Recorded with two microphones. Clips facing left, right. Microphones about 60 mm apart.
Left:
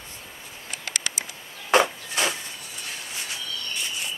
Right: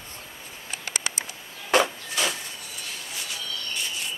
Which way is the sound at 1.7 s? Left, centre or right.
Left.